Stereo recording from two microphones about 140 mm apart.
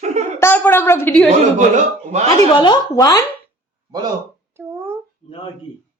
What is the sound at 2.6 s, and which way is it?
Speech, 30° left (ahead or behind).